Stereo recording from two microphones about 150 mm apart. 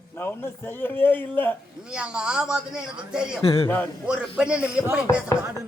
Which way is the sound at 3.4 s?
40° left (ahead or behind).